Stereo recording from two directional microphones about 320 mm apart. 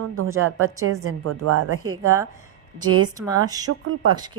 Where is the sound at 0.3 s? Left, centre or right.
Right.